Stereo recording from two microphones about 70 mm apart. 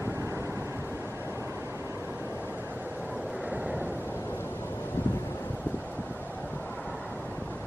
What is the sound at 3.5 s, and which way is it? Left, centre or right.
Eruption, right.